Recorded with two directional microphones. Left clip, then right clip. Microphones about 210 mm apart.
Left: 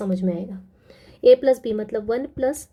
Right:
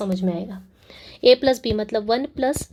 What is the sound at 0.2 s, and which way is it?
A woman's voice, 10° right (ahead or behind).